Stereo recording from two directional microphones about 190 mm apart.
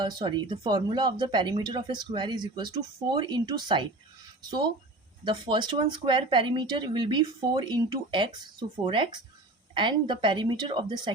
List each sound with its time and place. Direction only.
0.0 s speech: 25° right (ahead or behind)
5.2 s speech: 25° right (ahead or behind)